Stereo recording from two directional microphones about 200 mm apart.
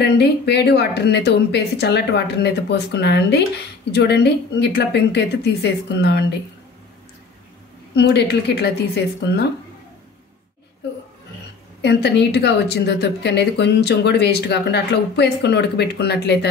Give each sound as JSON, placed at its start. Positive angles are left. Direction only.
{"t": 0.0, "sound": "a woman's voice", "side_deg": 55}
{"t": 7.9, "sound": "a woman's voice", "side_deg": 55}
{"t": 11.8, "sound": "a woman's voice", "side_deg": 55}